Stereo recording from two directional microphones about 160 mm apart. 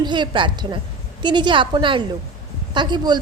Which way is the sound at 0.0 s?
30° right (ahead or behind).